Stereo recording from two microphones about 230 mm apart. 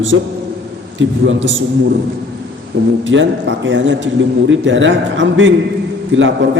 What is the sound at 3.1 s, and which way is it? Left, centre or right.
A man's voice, right.